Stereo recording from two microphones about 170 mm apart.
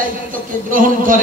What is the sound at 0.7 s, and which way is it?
Music, 55° right (ahead or behind).